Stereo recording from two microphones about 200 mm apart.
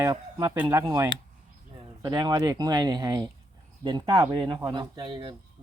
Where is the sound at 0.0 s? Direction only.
20° right (ahead or behind).